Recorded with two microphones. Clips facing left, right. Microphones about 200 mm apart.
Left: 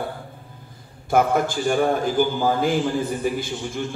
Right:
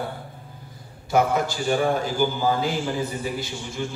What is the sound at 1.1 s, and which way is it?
A man's voice, 50° left (ahead or behind).